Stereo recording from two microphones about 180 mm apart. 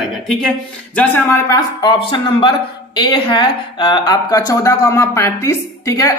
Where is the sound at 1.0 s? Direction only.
10° left (ahead or behind).